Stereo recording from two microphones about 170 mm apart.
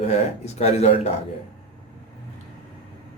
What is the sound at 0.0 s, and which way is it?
Speech, 40° left (ahead or behind).